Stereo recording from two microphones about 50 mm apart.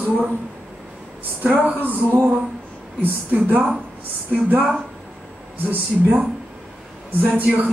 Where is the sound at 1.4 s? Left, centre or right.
Right.